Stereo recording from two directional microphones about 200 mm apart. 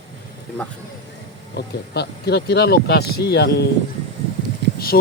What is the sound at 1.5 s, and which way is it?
Speech, 55° left (ahead or behind).